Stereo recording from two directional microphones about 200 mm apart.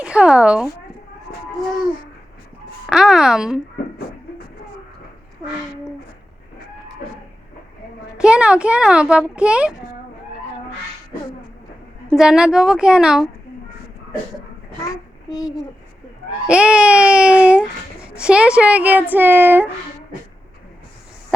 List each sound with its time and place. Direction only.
0.0 s speech: 5° right (ahead or behind)
2.8 s a child's voice: 5° right (ahead or behind)
8.2 s a child's voice: 5° right (ahead or behind)
12.0 s a child's voice: 5° right (ahead or behind)
16.5 s a child's voice: 5° right (ahead or behind)